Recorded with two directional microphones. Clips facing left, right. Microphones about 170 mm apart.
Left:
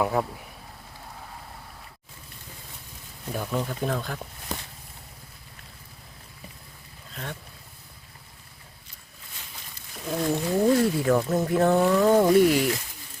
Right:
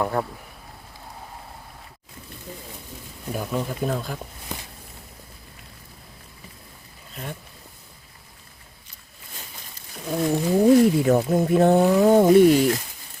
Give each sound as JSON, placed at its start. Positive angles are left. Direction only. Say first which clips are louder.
{"t": 0.0, "sound": "speech", "louder": "even", "side_deg": 0}
{"t": 3.3, "sound": "speech", "louder": "right 2 dB", "side_deg": -10}
{"t": 10.1, "sound": "speech", "louder": "right 4 dB", "side_deg": -5}